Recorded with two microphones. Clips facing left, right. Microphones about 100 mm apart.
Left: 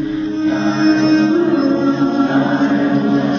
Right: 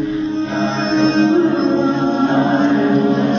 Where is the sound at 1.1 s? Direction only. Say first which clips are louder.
Left 2 dB; 30° right (ahead or behind).